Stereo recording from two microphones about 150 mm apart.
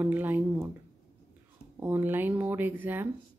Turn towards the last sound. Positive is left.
turn(degrees=-15)  # may be behind; listen again after turning